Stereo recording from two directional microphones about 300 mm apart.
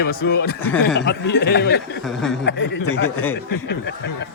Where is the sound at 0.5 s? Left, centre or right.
Centre.